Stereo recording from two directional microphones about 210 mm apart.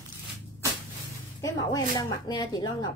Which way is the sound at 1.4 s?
15° left (ahead or behind).